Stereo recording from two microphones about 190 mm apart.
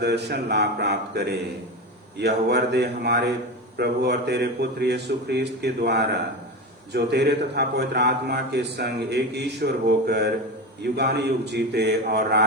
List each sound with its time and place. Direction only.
0.0 s a man's voice: 60° right (ahead or behind)